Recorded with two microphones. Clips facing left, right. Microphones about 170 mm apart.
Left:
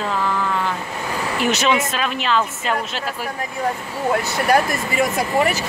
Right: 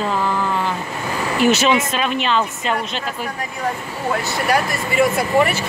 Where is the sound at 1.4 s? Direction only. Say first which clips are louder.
Right 3 dB; centre (ahead or behind).